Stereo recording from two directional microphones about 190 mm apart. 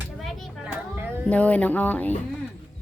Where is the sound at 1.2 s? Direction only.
5° left (ahead or behind).